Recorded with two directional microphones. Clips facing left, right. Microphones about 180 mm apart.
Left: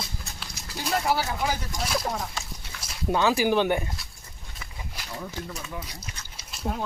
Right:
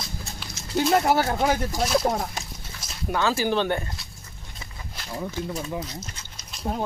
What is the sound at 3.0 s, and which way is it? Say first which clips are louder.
Speech: left 1 dB; 15° left (ahead or behind).